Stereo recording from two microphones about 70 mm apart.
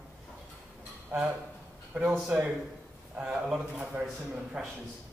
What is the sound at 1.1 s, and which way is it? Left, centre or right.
Speech, right.